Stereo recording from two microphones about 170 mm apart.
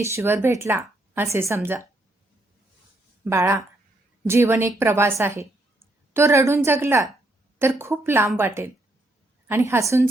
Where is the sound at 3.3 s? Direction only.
15° right (ahead or behind).